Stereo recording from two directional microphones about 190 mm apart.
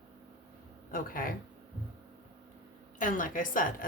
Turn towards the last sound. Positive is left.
turn(degrees=45)  # may be behind; listen again after turning